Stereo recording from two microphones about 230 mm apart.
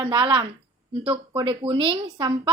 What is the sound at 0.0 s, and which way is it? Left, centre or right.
A woman's voice, centre.